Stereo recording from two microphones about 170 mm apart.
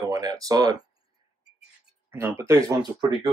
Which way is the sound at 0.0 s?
20° right (ahead or behind).